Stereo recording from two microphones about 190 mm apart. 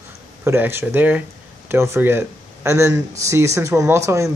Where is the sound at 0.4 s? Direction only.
10° right (ahead or behind).